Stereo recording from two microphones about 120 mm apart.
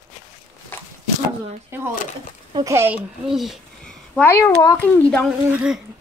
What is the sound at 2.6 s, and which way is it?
Speech, 20° right (ahead or behind).